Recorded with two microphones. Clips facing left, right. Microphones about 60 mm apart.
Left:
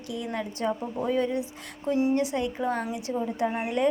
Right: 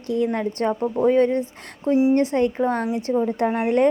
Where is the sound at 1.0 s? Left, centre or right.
Right.